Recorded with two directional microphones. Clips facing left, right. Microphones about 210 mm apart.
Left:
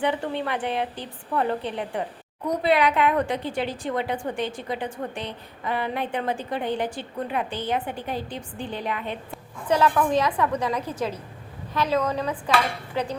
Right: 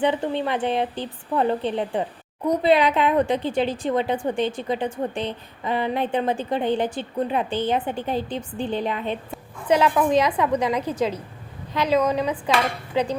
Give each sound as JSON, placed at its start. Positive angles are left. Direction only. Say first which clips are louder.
{"t": 0.0, "sound": "a woman's voice", "louder": "right 3 dB", "side_deg": -20}
{"t": 12.9, "sound": "dishes", "louder": "right 7 dB", "side_deg": -20}